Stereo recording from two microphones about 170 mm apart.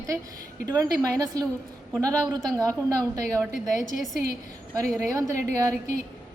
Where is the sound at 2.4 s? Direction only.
20° right (ahead or behind).